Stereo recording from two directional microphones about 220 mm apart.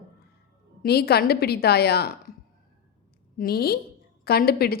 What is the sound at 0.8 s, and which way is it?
A woman's voice, 45° left (ahead or behind).